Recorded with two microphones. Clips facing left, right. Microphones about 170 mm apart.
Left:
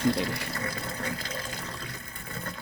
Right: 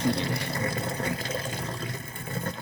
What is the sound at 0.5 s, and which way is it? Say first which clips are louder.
Water: right 5 dB; 25° right (ahead or behind).